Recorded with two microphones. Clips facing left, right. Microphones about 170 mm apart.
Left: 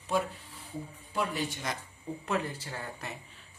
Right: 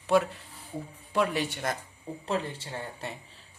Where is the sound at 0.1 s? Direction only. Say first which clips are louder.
Right 6 dB; 80° right.